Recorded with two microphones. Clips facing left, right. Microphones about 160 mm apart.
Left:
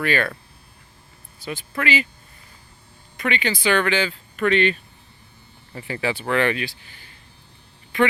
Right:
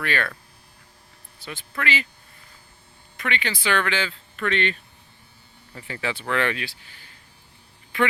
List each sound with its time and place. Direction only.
0.0 s speech: 5° left (ahead or behind)
1.7 s speech: 10° left (ahead or behind)
3.2 s speech: 5° left (ahead or behind)
6.0 s speech: 5° left (ahead or behind)